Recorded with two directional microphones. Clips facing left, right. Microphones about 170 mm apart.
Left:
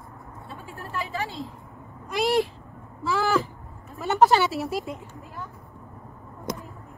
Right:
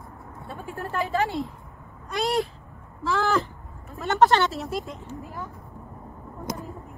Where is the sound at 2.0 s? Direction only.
Centre (ahead or behind).